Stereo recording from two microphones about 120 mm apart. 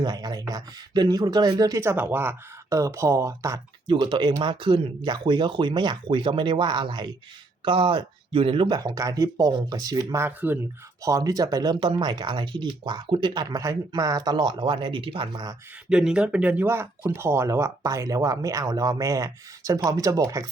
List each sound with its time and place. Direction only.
0.0 s speech: 35° right (ahead or behind)
3.8 s speech: 45° right (ahead or behind)
10.2 s speech: 15° right (ahead or behind)
11.0 s speech: 30° right (ahead or behind)
15.9 s speech: 5° right (ahead or behind); by 20.5 s 25° right (ahead or behind)